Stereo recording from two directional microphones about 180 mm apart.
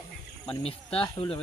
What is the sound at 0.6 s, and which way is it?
Speech, 30° left (ahead or behind).